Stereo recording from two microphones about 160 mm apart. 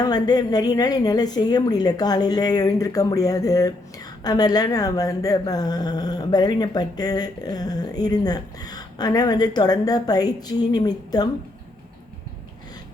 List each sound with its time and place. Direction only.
0.0 s speech: 25° left (ahead or behind)